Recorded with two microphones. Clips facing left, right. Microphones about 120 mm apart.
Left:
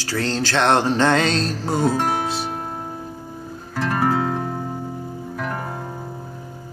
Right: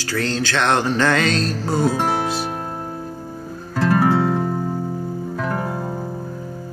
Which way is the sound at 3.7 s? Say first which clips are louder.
Right 4 dB; 5° right (ahead or behind).